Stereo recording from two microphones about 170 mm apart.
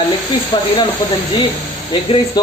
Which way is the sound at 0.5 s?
30° left (ahead or behind).